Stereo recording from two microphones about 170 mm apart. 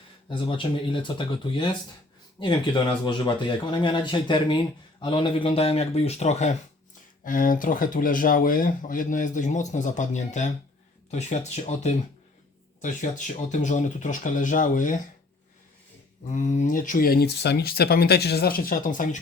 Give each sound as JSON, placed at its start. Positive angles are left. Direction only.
{"t": 0.3, "sound": "speech", "side_deg": 30}
{"t": 16.3, "sound": "speech", "side_deg": 45}